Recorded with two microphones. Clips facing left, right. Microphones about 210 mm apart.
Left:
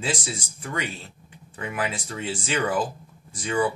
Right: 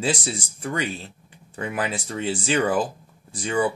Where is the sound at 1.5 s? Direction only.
35° right (ahead or behind).